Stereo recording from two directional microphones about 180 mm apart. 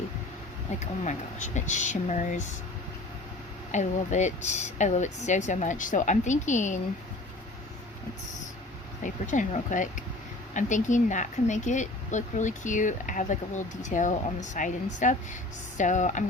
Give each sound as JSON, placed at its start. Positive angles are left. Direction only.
{"t": 0.8, "sound": "speech", "side_deg": 40}
{"t": 3.7, "sound": "speech", "side_deg": 40}
{"t": 9.0, "sound": "speech", "side_deg": 45}